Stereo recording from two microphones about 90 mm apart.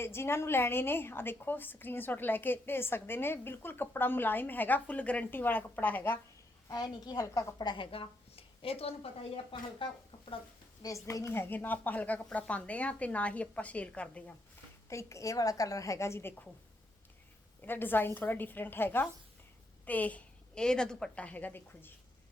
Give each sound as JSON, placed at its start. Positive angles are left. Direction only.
{"t": 0.0, "sound": "a woman's voice", "side_deg": 30}
{"t": 6.7, "sound": "a woman's voice", "side_deg": 45}
{"t": 7.6, "sound": "a woman's voice", "side_deg": 65}
{"t": 10.8, "sound": "speech", "side_deg": 35}
{"t": 14.8, "sound": "a woman's voice", "side_deg": 35}
{"t": 17.6, "sound": "a woman's voice", "side_deg": 20}